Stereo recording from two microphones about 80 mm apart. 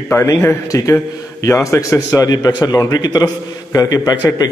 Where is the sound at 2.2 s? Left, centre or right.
Left.